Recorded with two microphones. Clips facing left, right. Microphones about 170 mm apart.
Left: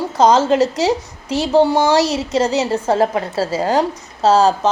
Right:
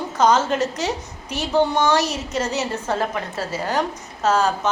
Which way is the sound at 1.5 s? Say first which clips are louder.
Left 5 dB; 30° left (ahead or behind).